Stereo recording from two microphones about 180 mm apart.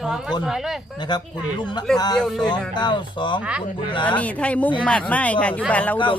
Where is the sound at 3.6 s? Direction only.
25° left (ahead or behind).